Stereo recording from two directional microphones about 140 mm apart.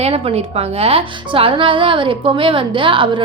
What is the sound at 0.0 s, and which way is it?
A woman's voice, 45° right (ahead or behind).